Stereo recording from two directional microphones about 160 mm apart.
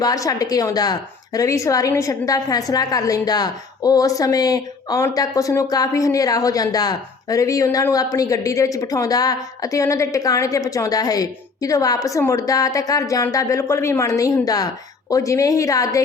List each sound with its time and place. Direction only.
0.0 s a woman's voice: 20° left (ahead or behind)